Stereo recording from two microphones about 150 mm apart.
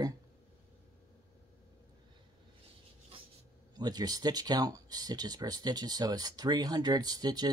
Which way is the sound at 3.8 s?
25° right (ahead or behind).